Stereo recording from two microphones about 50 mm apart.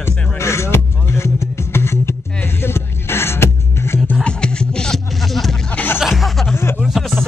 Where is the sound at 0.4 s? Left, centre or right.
Left.